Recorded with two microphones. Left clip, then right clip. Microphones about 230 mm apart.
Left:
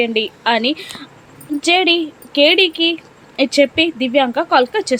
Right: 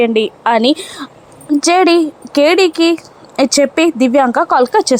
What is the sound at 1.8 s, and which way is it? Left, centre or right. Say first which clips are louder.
Speech: right 5 dB; right.